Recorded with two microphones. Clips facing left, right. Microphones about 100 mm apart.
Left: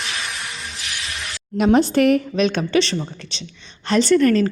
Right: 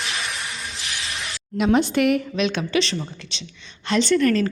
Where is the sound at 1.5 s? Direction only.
40° left (ahead or behind).